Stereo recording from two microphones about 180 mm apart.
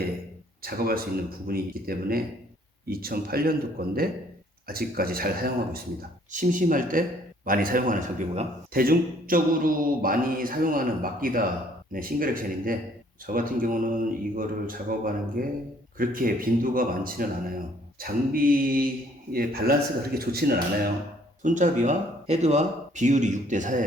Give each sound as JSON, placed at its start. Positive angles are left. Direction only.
{"t": 0.6, "sound": "a man's voice", "side_deg": -55}
{"t": 21.4, "sound": "a man's voice", "side_deg": -45}